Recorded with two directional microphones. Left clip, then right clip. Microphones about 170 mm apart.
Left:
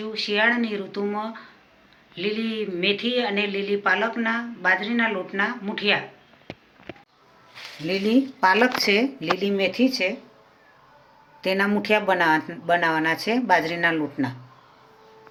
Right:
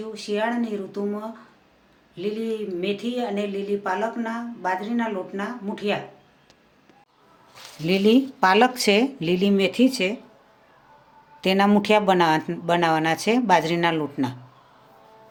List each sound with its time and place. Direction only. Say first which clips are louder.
0.1 s speech: left 5 dB; 20° right (ahead or behind)
7.9 s speech: right 3 dB; 65° right (ahead or behind)
11.3 s speech: right 3 dB; 75° right (ahead or behind)